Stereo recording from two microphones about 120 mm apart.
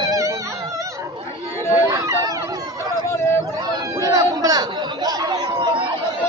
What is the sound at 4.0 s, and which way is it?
Chatter, 30° right (ahead or behind).